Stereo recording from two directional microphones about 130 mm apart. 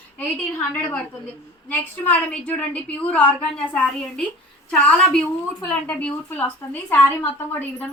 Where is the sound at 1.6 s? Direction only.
15° left (ahead or behind).